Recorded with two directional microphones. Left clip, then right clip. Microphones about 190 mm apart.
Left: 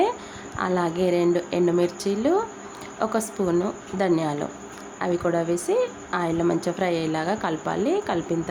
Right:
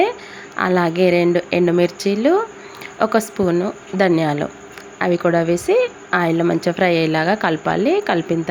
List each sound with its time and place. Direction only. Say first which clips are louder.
0.5 s a woman's voice: right 7 dB; 25° right (ahead or behind)
3.9 s a woman's voice: right 7 dB; 25° right (ahead or behind)